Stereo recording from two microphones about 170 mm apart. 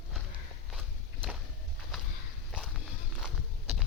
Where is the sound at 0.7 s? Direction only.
5° right (ahead or behind).